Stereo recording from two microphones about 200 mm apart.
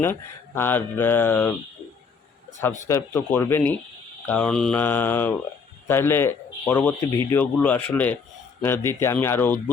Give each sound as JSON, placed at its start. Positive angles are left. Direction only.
{"t": 0.0, "sound": "speech", "side_deg": 10}
{"t": 2.8, "sound": "speech", "side_deg": 15}